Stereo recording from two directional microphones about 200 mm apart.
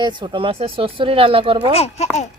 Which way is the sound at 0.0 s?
20° right (ahead or behind).